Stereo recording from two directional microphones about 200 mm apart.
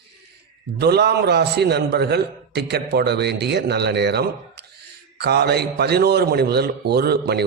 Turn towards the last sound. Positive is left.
turn(degrees=-55)  # may be behind; listen again after turning